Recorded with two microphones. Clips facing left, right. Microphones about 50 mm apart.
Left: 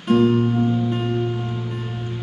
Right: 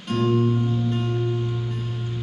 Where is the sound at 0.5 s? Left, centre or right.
Left.